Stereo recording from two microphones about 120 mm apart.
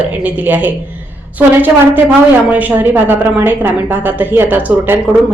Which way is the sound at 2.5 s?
15° right (ahead or behind).